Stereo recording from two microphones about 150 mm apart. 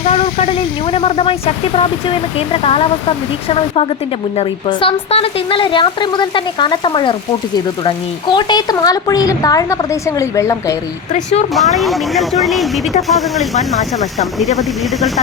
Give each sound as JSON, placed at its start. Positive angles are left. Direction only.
{"t": 0.0, "sound": "speech", "side_deg": 40}
{"t": 4.4, "sound": "speech", "side_deg": 35}
{"t": 11.1, "sound": "speech", "side_deg": 50}
{"t": 11.5, "sound": "speech", "side_deg": 0}